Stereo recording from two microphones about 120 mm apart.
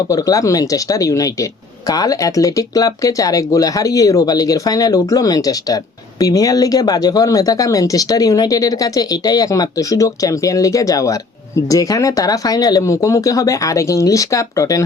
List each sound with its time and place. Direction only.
0.1 s speech: 30° left (ahead or behind)